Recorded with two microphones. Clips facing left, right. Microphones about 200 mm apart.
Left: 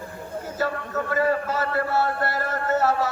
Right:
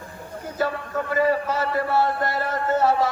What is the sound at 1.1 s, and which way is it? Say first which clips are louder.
Speech: right 2 dB; 10° right (ahead or behind).